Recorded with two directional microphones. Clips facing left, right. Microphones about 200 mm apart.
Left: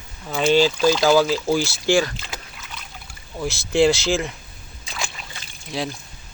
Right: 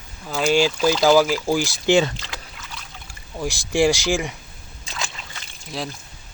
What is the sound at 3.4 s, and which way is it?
Speech, 15° right (ahead or behind).